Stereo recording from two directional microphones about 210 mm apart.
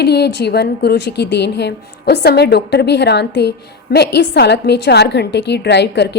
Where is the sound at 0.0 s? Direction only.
50° left (ahead or behind).